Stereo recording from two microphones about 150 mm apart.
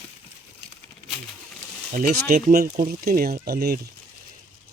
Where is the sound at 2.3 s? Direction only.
75° right (ahead or behind); by 3.8 s 90° right.